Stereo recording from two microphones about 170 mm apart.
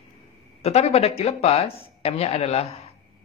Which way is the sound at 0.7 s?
40° left (ahead or behind).